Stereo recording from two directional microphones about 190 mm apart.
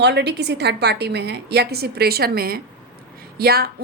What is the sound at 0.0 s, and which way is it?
A woman's voice, 60° right (ahead or behind).